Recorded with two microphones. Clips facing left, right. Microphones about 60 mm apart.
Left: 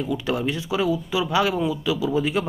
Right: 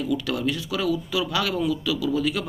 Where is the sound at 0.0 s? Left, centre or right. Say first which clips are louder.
Left 1 dB; left.